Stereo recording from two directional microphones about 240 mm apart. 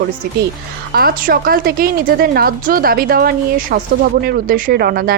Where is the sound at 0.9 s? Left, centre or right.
Right.